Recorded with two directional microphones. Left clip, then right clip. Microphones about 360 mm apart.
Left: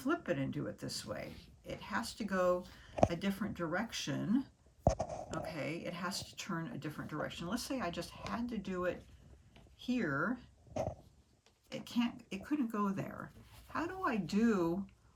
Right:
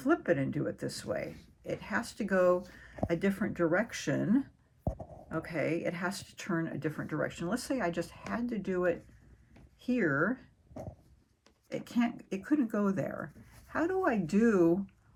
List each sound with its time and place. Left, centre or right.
0.0 s speech: centre
4.9 s speech: right
5.3 s speech: centre
11.9 s speech: centre